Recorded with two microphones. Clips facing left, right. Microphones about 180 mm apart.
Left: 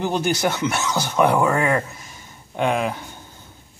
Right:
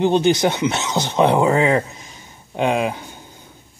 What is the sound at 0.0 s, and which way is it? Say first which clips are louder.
Speech: right 6 dB; 20° right (ahead or behind).